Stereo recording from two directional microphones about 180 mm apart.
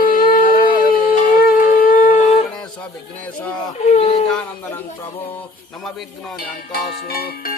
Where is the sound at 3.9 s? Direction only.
35° left (ahead or behind).